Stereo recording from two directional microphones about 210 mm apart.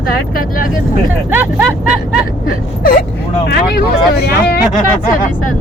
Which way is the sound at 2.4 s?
40° left (ahead or behind).